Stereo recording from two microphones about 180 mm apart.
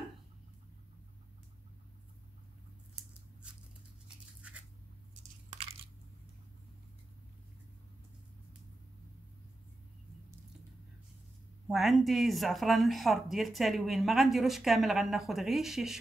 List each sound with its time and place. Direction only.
4.4 s a sound: 5° right (ahead or behind)
5.5 s coin: 35° right (ahead or behind)
11.6 s speech: centre (ahead or behind)